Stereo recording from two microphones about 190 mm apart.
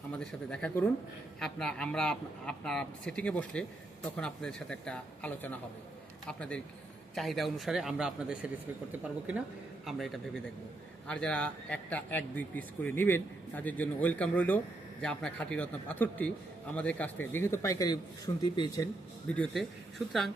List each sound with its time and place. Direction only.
0.1 s a man's voice: 5° left (ahead or behind); by 18.9 s 25° left (ahead or behind)
19.3 s a man's voice: 5° left (ahead or behind)